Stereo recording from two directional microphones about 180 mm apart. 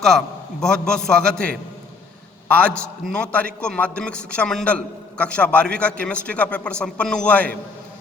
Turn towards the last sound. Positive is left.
turn(degrees=5)  # may be behind; listen again after turning